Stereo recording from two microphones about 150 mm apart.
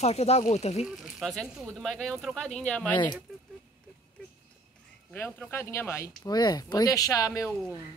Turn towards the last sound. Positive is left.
turn(degrees=20)  # may be behind; listen again after turning